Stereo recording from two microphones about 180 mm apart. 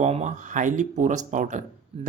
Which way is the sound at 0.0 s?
40° right (ahead or behind).